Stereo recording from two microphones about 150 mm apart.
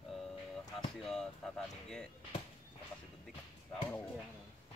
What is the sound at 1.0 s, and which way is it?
Speech, 5° left (ahead or behind).